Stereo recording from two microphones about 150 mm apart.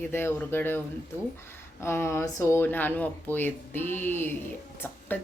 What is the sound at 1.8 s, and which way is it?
Speech, 15° left (ahead or behind).